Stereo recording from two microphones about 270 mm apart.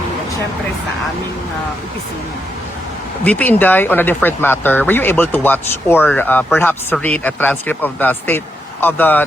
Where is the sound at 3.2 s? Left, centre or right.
Centre.